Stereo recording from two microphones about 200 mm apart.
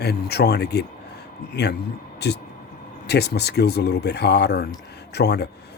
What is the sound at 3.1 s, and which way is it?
Speech, 55° left (ahead or behind).